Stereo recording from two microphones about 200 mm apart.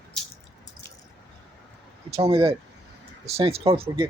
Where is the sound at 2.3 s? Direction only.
30° right (ahead or behind).